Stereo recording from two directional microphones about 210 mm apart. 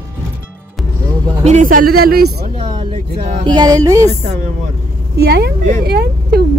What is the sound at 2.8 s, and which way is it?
Speech, 30° right (ahead or behind).